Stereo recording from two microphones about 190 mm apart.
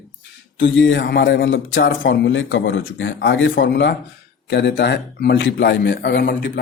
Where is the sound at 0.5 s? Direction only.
75° left (ahead or behind).